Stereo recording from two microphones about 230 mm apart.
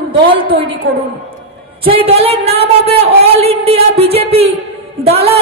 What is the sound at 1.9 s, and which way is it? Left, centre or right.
Speech, right.